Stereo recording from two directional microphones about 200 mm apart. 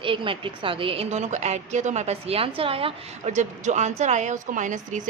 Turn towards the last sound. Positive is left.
turn(degrees=-40)  # may be behind; listen again after turning